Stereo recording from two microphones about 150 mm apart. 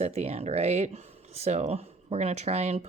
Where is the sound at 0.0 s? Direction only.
45° right (ahead or behind).